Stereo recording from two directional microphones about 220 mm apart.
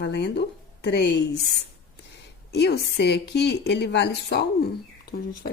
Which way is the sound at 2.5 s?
50° left (ahead or behind).